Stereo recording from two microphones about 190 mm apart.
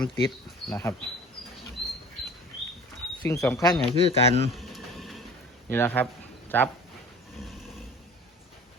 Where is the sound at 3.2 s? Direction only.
15° left (ahead or behind).